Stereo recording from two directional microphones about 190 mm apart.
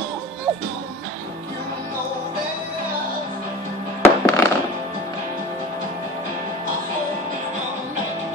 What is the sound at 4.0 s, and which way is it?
Music, 10° left (ahead or behind).